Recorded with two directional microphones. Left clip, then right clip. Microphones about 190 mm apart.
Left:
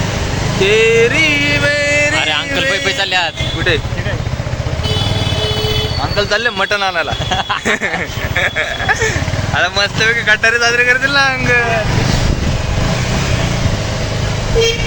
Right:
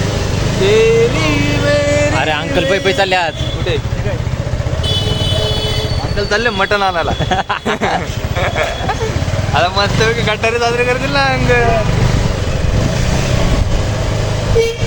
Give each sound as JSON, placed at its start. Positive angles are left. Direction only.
{"t": 0.6, "sound": "vehicle", "side_deg": 0}
{"t": 1.7, "sound": "music", "side_deg": -15}
{"t": 2.1, "sound": "a sound", "side_deg": -45}
{"t": 2.7, "sound": "speech", "side_deg": -50}
{"t": 6.1, "sound": "speech", "side_deg": -5}
{"t": 7.3, "sound": "speech", "side_deg": -55}
{"t": 8.4, "sound": "speech", "side_deg": 0}